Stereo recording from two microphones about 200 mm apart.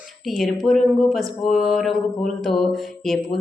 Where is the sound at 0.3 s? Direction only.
Centre (ahead or behind).